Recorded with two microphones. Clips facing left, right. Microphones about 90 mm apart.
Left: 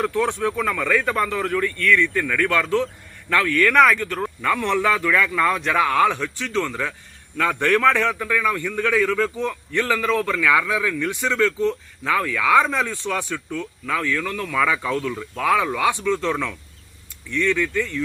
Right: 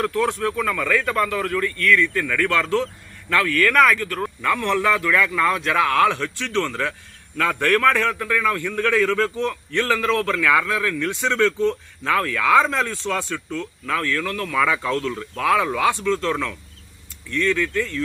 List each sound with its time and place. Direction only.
0.0 s speech: 15° left (ahead or behind)
2.1 s speech: 5° left (ahead or behind)
8.2 s speech: centre (ahead or behind)
15.9 s speech: 10° left (ahead or behind)